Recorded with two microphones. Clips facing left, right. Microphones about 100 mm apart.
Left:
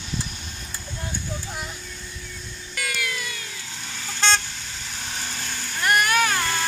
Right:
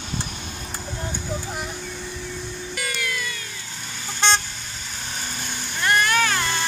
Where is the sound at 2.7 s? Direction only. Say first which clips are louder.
Left 1 dB; centre (ahead or behind).